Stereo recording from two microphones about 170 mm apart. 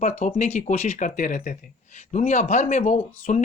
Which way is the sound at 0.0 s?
45° left (ahead or behind).